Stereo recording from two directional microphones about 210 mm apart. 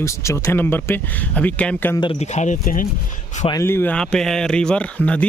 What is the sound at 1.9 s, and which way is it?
Speech, 25° left (ahead or behind).